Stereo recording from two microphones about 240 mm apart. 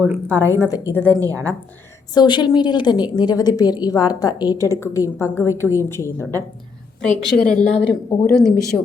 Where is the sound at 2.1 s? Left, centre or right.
Centre.